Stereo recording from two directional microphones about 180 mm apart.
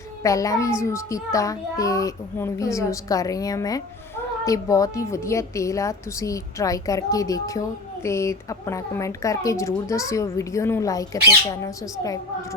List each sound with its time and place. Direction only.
0.2 s a child's voice: 20° left (ahead or behind)